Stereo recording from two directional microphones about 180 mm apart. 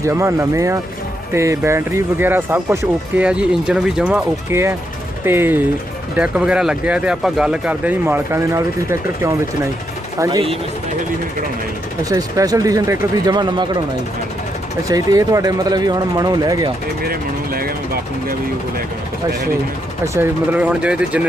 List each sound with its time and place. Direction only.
0.0 s speech: 15° right (ahead or behind)
12.0 s speech: 20° right (ahead or behind)
14.8 s speech: 20° right (ahead or behind)
17.1 s vehicle: 55° right (ahead or behind)
20.1 s speech: 10° right (ahead or behind)